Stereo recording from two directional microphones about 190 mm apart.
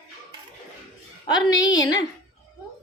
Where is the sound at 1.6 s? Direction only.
20° left (ahead or behind).